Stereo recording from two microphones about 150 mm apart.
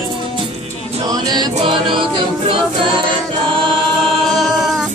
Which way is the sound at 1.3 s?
30° right (ahead or behind).